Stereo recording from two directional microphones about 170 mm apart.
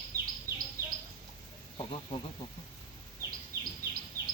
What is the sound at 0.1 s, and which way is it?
Insect, 60° right (ahead or behind).